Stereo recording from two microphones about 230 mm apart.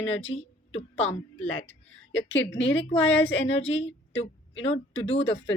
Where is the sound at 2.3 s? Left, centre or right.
Left.